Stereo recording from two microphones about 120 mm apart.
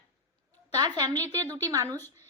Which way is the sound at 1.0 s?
30° right (ahead or behind).